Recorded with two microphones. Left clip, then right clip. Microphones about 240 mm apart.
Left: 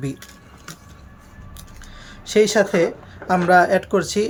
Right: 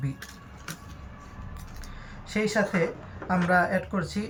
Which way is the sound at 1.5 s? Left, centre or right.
Left.